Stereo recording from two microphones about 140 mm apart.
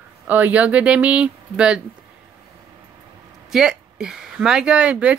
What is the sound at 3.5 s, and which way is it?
Speech, 5° right (ahead or behind).